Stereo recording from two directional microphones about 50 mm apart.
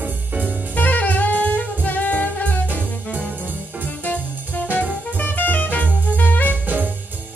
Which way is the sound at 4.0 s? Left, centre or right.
Left.